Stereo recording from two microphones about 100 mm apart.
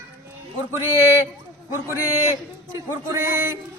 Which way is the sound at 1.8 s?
20° right (ahead or behind).